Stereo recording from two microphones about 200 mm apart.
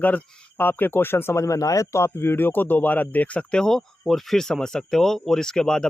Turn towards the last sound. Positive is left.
turn(degrees=5)  # may be behind; listen again after turning